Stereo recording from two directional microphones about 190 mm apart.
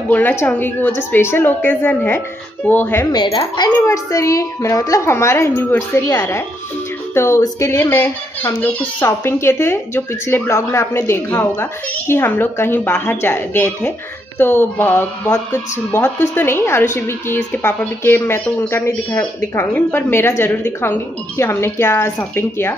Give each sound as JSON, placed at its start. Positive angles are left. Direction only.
{"t": 0.1, "sound": "a child's voice", "side_deg": 10}
{"t": 3.2, "sound": "a woman's voice", "side_deg": 25}
{"t": 3.7, "sound": "a child's voice", "side_deg": 15}